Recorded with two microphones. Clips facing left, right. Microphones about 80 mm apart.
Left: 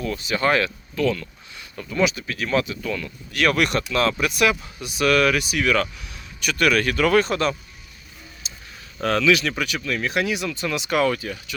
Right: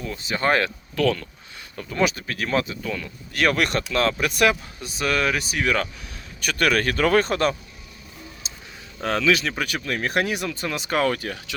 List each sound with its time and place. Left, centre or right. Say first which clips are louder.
0.0 s speech: left 2 dB; right
0.5 s speech: even; right
1.8 s speech: left 1 dB; right
8.4 s a sound: right 1 dB; right
9.0 s speech: left 2 dB; right
11.2 s speech: even; right